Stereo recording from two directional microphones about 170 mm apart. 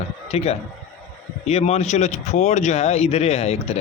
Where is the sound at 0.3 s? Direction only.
40° left (ahead or behind).